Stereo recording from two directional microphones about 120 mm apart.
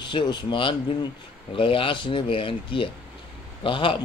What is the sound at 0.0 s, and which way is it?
Speech, 40° left (ahead or behind).